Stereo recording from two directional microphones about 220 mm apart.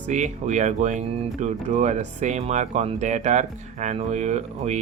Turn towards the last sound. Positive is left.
turn(degrees=-30)  # may be behind; listen again after turning